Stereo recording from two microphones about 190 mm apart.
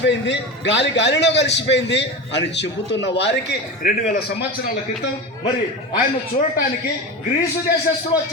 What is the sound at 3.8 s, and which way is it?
Speech, 50° left (ahead or behind).